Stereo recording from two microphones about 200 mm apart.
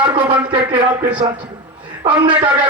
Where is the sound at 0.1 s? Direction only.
25° right (ahead or behind).